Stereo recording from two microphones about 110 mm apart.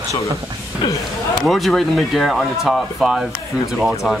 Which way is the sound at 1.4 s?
Centre (ahead or behind).